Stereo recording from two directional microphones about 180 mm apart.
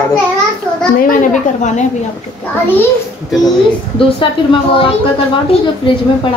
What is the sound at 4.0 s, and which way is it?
Speech, 30° left (ahead or behind).